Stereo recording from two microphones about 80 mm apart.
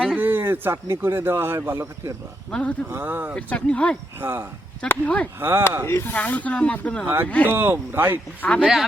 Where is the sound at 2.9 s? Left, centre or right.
Right.